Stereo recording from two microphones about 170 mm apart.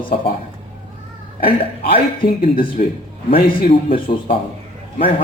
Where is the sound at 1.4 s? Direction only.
65° left (ahead or behind).